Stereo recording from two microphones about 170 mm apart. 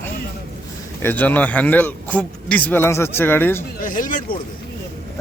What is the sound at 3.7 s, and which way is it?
Speech, 50° left (ahead or behind).